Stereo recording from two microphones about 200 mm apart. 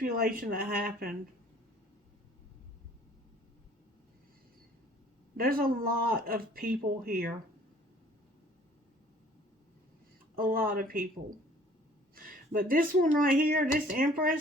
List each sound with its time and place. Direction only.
0.0 s speech: 45° right (ahead or behind)
5.4 s speech: 45° right (ahead or behind)
10.3 s speech: 45° right (ahead or behind)
12.1 s a sound: 45° right (ahead or behind)
12.5 s speech: 45° right (ahead or behind)